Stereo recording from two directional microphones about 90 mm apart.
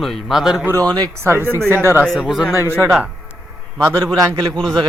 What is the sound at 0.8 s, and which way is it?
Speech, 50° right (ahead or behind).